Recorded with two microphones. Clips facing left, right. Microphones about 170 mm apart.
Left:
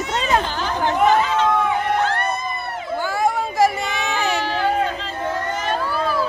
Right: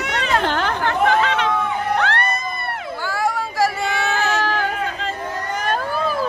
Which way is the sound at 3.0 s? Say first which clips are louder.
Left 2 dB; 20° left (ahead or behind).